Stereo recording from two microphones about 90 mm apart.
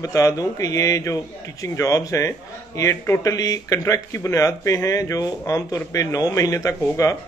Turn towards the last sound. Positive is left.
turn(degrees=35)  # may be behind; listen again after turning